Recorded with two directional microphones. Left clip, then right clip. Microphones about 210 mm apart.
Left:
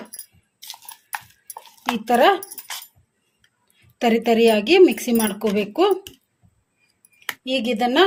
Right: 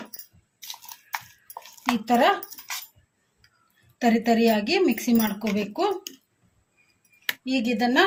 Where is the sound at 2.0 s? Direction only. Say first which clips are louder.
Left 5 dB; 45° left (ahead or behind).